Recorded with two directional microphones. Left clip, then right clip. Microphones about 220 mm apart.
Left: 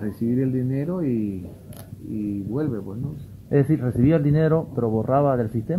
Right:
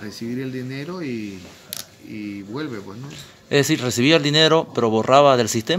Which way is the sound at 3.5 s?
35° right (ahead or behind).